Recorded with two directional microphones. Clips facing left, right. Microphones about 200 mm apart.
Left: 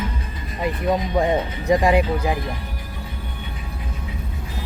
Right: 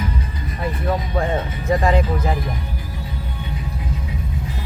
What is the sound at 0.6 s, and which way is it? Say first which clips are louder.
Speech: left 2 dB; 15° left (ahead or behind).